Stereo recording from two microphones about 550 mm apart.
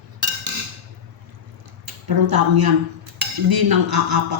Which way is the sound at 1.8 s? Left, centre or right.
Right.